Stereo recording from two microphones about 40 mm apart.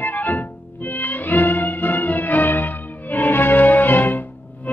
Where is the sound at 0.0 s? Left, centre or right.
Left.